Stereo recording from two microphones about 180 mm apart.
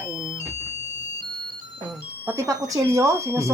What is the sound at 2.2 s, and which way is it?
Speech, 15° right (ahead or behind).